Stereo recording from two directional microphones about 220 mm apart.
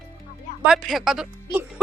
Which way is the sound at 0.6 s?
Centre (ahead or behind).